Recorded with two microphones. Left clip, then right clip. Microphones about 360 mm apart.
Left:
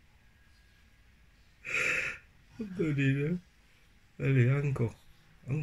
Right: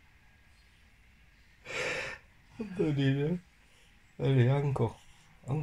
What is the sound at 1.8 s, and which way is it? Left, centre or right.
Gasp, right.